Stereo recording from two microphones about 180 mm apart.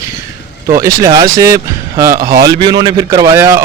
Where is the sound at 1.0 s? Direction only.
20° right (ahead or behind).